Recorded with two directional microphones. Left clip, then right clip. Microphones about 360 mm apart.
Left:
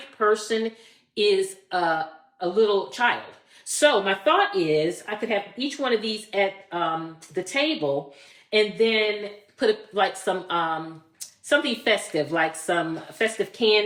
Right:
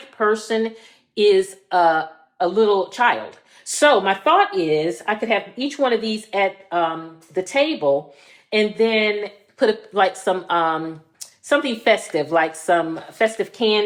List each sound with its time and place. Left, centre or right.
0.2 s a man's voice: centre